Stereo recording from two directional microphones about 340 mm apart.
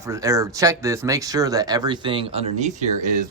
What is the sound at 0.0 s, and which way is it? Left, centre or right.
Speech, centre.